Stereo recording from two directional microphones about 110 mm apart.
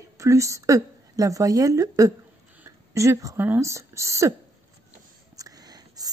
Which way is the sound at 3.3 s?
20° right (ahead or behind).